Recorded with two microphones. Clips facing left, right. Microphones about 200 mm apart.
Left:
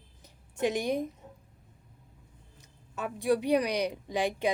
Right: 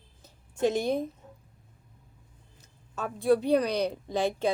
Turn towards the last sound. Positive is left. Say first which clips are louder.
# right 2 dB
turn(degrees=15)  # may be behind; listen again after turning